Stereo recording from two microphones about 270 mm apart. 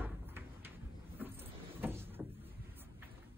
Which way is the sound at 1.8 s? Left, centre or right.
Centre.